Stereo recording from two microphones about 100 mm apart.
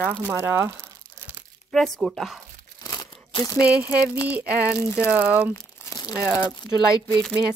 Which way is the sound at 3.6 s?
15° right (ahead or behind).